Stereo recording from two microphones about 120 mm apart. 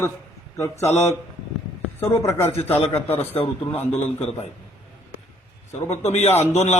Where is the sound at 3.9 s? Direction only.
60° left (ahead or behind).